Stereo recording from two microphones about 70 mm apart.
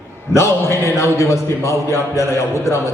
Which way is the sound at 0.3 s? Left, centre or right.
Left.